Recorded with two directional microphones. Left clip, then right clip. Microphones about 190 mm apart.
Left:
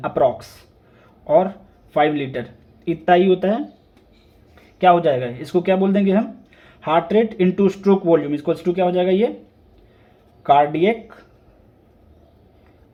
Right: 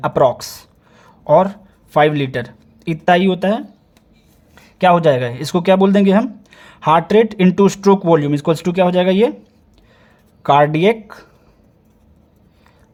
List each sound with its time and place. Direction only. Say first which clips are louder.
0.0 s speech: right 4 dB; 40° right (ahead or behind)
4.8 s speech: right 3 dB; 40° right (ahead or behind)
10.4 s speech: right 3 dB; 40° right (ahead or behind)